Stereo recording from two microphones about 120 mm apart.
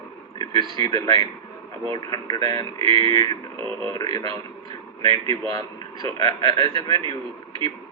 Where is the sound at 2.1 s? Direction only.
35° left (ahead or behind).